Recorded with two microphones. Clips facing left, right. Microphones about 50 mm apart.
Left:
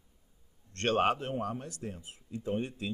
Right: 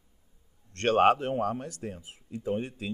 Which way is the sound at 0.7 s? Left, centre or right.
Right.